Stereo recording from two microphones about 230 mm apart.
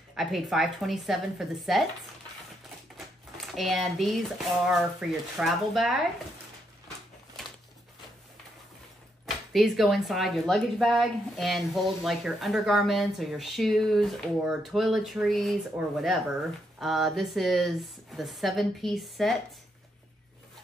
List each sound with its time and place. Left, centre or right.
0.1 s speech: centre
3.3 s speech: centre
9.2 s speech: centre
16.8 s speech: centre